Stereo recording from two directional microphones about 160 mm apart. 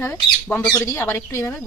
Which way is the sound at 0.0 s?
15° left (ahead or behind).